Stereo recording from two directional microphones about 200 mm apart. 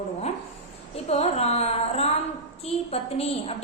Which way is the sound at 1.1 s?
30° left (ahead or behind).